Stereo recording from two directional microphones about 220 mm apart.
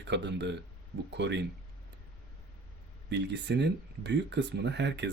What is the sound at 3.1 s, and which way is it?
Speech, 50° right (ahead or behind).